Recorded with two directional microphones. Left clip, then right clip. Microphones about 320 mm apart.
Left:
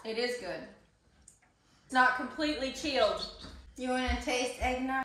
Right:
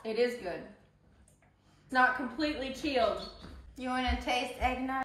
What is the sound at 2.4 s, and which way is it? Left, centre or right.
Speech, centre.